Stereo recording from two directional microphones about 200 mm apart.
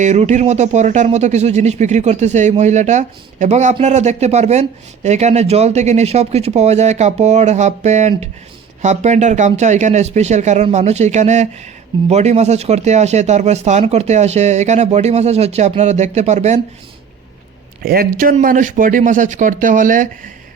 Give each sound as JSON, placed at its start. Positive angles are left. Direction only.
{"t": 0.0, "sound": "speech", "side_deg": -35}
{"t": 17.8, "sound": "speech", "side_deg": -45}